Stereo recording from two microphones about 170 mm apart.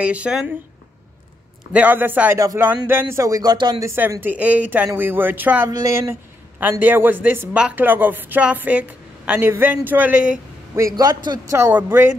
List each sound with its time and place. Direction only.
0.0 s speech: 5° right (ahead or behind)
1.7 s speech: 10° right (ahead or behind); by 3.9 s 25° right (ahead or behind)
3.9 s speech: 10° right (ahead or behind)
11.0 s speech: 25° right (ahead or behind)